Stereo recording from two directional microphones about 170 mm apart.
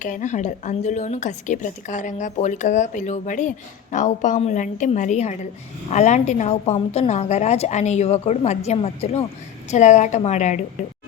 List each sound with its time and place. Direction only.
0.0 s a woman's voice: 45° left (ahead or behind)